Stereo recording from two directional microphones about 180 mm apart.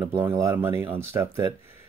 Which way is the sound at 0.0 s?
15° right (ahead or behind).